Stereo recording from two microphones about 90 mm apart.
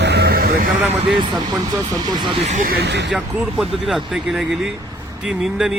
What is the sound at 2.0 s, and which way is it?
Speech, 50° right (ahead or behind).